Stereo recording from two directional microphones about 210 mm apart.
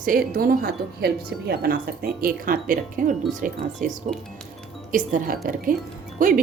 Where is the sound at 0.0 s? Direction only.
40° right (ahead or behind).